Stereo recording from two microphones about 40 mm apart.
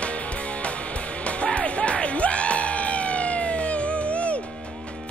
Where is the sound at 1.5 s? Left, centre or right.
Left.